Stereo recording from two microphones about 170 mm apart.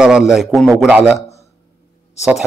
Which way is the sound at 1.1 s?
40° left (ahead or behind).